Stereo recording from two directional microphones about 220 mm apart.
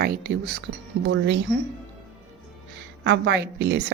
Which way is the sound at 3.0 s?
50° right (ahead or behind).